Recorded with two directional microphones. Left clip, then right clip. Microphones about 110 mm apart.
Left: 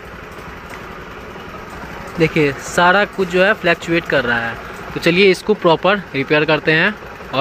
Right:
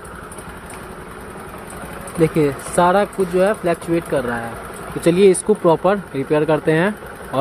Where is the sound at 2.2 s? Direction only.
15° right (ahead or behind).